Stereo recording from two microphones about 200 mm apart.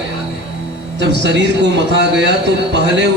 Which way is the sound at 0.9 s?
60° right (ahead or behind).